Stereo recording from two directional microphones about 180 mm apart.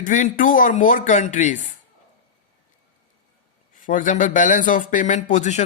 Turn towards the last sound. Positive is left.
turn(degrees=40)  # may be behind; listen again after turning